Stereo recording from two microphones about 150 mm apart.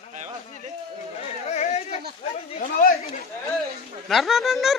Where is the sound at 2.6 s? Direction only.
70° left (ahead or behind).